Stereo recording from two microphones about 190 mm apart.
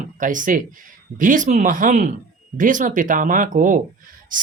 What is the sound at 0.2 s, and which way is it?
Speech, 45° right (ahead or behind).